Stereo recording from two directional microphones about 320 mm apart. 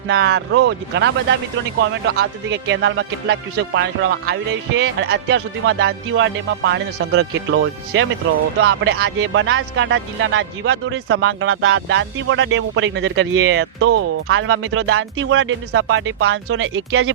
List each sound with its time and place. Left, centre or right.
0.1 s speech: right